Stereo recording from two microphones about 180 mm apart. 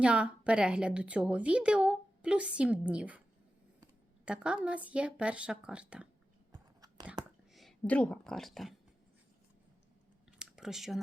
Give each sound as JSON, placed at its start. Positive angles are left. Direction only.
{"t": 0.0, "sound": "a woman's voice", "side_deg": -5}
{"t": 4.3, "sound": "a woman's voice", "side_deg": -5}
{"t": 6.5, "sound": "chewing", "side_deg": -20}
{"t": 7.5, "sound": "a woman's voice", "side_deg": 0}
{"t": 10.3, "sound": "a sound", "side_deg": -5}